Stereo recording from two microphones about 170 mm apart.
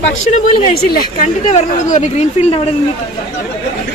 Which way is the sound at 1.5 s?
45° left (ahead or behind).